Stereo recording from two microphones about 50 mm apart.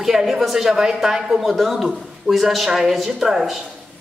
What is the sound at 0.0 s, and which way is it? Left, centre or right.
A woman's voice, centre.